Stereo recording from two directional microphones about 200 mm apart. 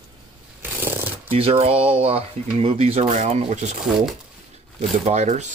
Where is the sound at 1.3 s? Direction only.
30° right (ahead or behind).